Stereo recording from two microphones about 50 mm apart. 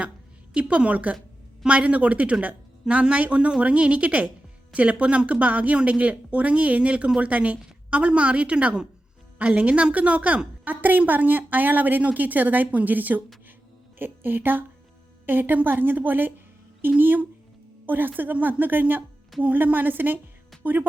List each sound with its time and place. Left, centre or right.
0.5 s a woman's voice: right